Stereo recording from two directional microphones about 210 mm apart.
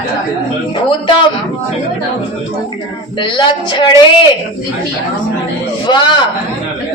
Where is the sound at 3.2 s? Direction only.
20° left (ahead or behind).